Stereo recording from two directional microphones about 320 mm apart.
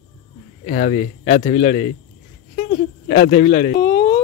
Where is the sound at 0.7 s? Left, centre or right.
Left.